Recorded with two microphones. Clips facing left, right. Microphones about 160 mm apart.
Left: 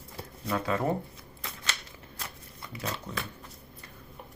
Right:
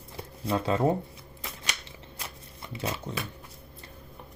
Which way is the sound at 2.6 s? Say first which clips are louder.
Right 3 dB; 25° right (ahead or behind).